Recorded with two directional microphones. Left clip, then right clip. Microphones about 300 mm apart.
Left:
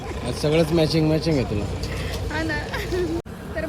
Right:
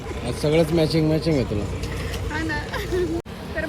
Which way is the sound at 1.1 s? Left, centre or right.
Centre.